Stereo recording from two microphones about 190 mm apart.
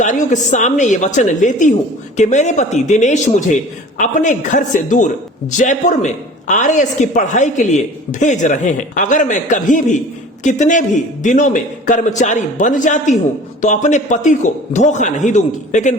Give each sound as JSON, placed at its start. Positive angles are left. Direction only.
{"t": 0.0, "sound": "a man's voice", "side_deg": 40}